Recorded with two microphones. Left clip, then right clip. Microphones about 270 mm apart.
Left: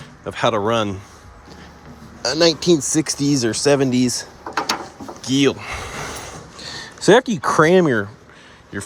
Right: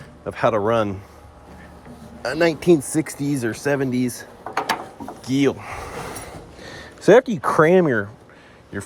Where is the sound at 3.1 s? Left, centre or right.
Left.